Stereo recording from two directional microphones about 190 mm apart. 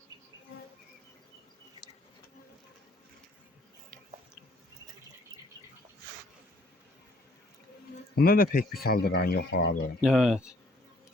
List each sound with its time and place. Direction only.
8.1 s speech: 50° left (ahead or behind)
10.0 s speech: centre (ahead or behind)